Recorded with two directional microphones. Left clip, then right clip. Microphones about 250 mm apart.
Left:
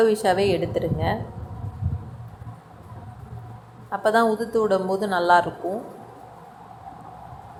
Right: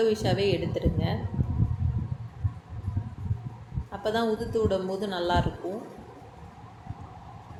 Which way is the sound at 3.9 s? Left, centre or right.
Centre.